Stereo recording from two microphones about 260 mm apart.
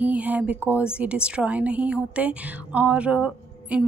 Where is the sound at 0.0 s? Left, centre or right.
Centre.